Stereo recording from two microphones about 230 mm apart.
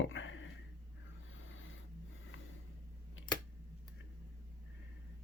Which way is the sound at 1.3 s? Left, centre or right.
Left.